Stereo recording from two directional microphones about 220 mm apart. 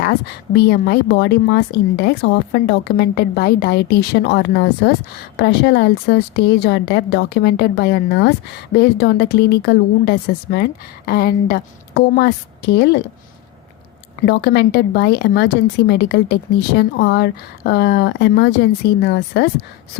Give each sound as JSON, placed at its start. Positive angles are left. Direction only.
{"t": 0.0, "sound": "speech", "side_deg": 45}
{"t": 14.3, "sound": "speech", "side_deg": 50}